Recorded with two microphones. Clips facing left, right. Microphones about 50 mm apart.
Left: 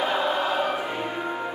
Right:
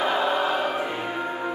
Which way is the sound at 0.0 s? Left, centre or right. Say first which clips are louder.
Right 1 dB; centre.